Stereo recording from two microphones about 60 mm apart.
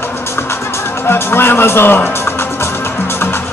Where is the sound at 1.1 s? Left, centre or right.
Left.